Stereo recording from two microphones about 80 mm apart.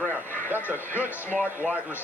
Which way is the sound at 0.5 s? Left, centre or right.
Left.